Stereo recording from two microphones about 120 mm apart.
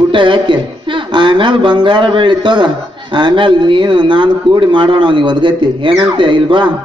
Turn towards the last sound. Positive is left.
turn(degrees=-40)  # may be behind; listen again after turning